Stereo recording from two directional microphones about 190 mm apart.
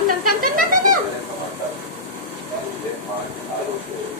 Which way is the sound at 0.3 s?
45° right (ahead or behind).